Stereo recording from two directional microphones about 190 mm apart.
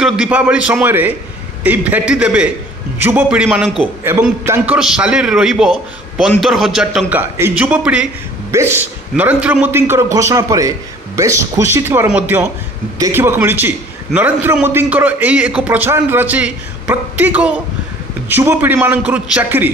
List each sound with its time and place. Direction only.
0.0 s a man's voice: 5° right (ahead or behind)
4.7 s a man's voice: 5° right (ahead or behind)